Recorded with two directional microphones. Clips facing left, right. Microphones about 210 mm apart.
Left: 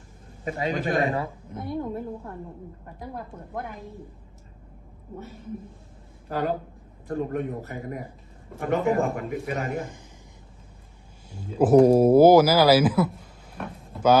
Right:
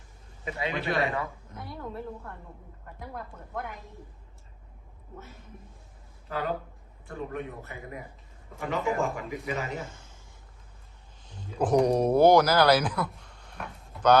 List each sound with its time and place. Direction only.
0.4 s a man's voice: 45° left (ahead or behind)
1.5 s a woman's voice: 20° left (ahead or behind)
6.2 s a man's voice: 40° left (ahead or behind)
8.5 s a man's voice: 55° left (ahead or behind)
9.8 s a woman's voice: 15° left (ahead or behind)
11.3 s speech: 10° left (ahead or behind)
13.9 s a sound: 5° left (ahead or behind)